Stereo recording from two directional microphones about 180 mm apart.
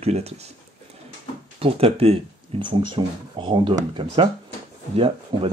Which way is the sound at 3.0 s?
25° right (ahead or behind).